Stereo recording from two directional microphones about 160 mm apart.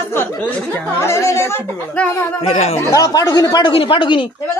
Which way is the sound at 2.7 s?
20° left (ahead or behind).